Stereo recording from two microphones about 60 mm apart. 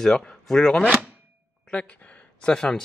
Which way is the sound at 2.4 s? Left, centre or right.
Centre.